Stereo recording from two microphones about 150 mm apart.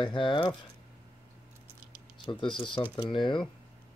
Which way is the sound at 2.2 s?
35° left (ahead or behind).